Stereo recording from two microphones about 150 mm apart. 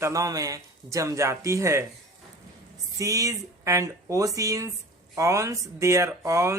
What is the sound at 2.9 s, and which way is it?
A man's voice, 20° right (ahead or behind).